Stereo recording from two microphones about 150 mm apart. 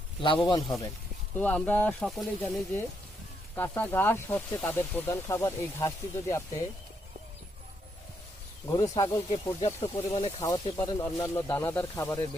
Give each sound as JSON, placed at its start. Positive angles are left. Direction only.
{"t": 0.2, "sound": "speech", "side_deg": 35}
{"t": 1.4, "sound": "speech", "side_deg": 10}
{"t": 3.5, "sound": "speech", "side_deg": 15}
{"t": 8.6, "sound": "speech", "side_deg": 20}
{"t": 9.3, "sound": "speech", "side_deg": 40}
{"t": 10.4, "sound": "speech", "side_deg": 30}